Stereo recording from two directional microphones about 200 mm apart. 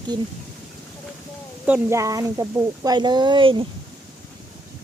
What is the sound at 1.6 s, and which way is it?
Speech, 10° right (ahead or behind).